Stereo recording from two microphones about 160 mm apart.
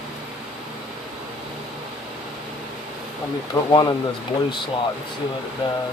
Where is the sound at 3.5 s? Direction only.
20° left (ahead or behind).